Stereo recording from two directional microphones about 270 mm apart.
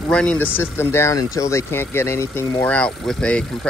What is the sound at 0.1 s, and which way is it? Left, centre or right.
Speech, centre.